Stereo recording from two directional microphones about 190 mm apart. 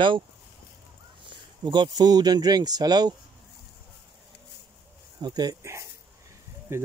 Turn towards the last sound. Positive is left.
turn(degrees=-10)  # may be behind; listen again after turning